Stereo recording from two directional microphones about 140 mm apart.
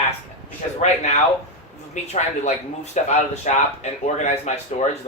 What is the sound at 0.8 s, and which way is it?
Speech, 50° left (ahead or behind).